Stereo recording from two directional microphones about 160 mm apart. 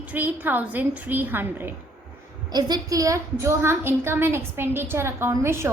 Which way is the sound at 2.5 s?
25° right (ahead or behind).